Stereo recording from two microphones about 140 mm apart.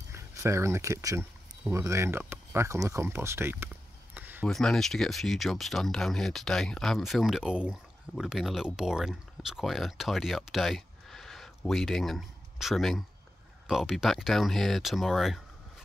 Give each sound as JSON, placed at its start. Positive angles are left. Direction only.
{"t": 0.1, "sound": "speech", "side_deg": -20}
{"t": 4.5, "sound": "speech", "side_deg": 5}